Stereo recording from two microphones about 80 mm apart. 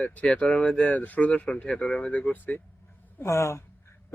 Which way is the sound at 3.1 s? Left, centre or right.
Left.